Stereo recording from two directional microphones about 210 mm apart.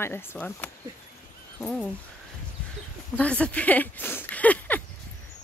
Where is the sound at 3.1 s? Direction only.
5° left (ahead or behind).